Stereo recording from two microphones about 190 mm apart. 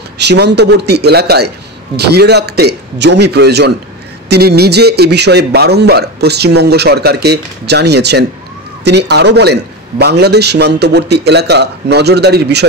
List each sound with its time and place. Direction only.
0.3 s a man's voice: 60° right (ahead or behind)